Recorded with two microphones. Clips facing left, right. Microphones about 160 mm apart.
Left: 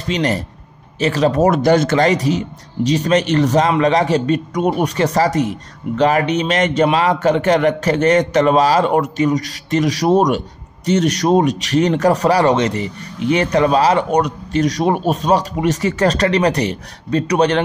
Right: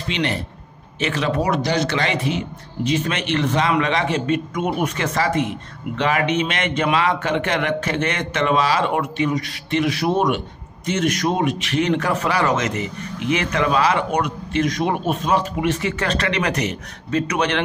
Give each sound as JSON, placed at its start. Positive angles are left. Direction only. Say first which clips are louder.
{"t": 0.1, "sound": "a man's voice", "louder": "left 5 dB", "side_deg": 40}